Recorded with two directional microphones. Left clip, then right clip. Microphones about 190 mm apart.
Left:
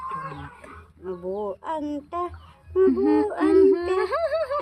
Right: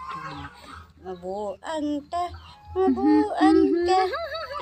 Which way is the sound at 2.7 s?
30° left (ahead or behind).